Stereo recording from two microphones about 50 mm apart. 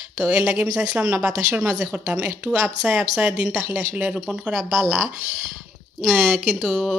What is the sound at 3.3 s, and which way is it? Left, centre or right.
A woman's voice, centre.